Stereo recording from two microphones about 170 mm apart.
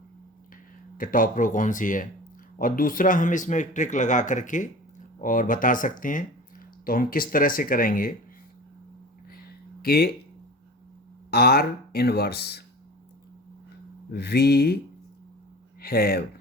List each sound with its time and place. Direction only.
0.9 s speech: 55° left (ahead or behind)
9.3 s a sound: 60° left (ahead or behind)
11.3 s speech: 65° left (ahead or behind)
14.1 s speech: 70° left (ahead or behind)
15.8 s speech: 65° left (ahead or behind)